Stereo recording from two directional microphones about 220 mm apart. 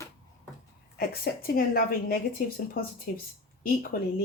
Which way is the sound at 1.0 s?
45° left (ahead or behind).